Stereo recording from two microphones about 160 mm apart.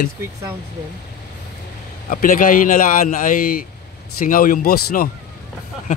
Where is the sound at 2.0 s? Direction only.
60° left (ahead or behind).